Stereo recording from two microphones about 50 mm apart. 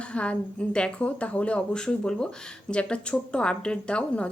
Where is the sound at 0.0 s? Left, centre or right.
Left.